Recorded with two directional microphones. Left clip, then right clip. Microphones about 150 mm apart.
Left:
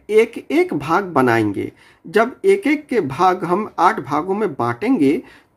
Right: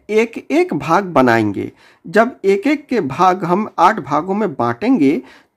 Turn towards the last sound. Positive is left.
turn(degrees=-35)  # may be behind; listen again after turning